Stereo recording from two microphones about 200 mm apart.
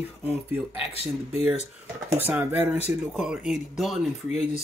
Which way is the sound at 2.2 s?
10° right (ahead or behind).